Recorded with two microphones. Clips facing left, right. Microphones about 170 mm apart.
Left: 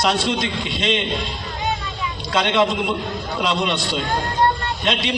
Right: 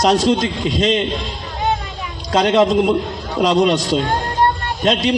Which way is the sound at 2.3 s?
40° right (ahead or behind).